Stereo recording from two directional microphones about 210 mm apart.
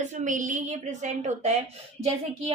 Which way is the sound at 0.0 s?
35° right (ahead or behind).